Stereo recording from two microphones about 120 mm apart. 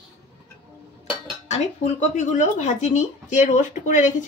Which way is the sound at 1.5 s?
90° left.